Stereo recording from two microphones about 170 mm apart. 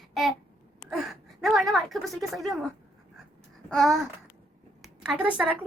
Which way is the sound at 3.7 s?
Centre (ahead or behind).